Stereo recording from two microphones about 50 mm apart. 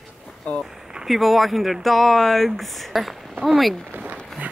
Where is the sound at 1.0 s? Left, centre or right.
Centre.